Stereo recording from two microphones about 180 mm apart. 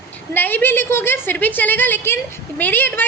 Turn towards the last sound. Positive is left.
turn(degrees=10)  # may be behind; listen again after turning